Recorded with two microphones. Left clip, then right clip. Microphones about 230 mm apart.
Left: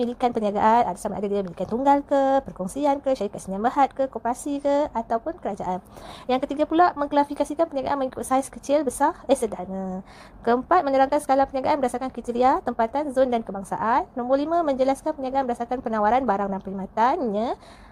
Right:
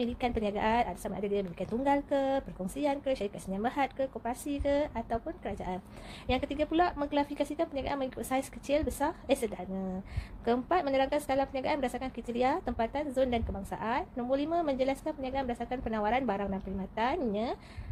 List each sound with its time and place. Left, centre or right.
0.0 s a woman's voice: left